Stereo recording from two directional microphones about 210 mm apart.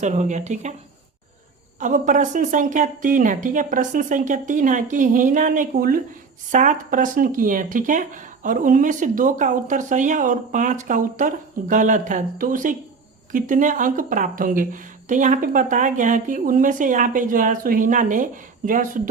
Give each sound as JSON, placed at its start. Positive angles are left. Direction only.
{"t": 0.0, "sound": "speech", "side_deg": -35}
{"t": 1.8, "sound": "speech", "side_deg": -35}